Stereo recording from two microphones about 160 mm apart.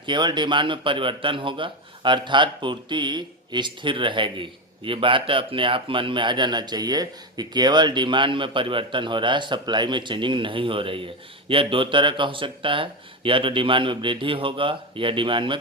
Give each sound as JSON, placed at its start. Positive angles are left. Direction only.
{"t": 0.0, "sound": "speech", "side_deg": -30}